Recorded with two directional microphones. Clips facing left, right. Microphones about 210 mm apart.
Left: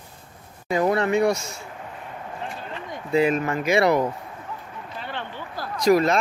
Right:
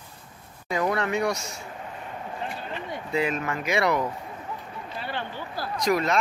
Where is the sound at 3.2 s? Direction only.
35° left (ahead or behind).